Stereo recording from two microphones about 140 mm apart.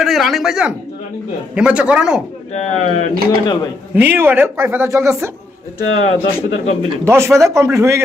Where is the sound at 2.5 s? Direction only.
55° left (ahead or behind).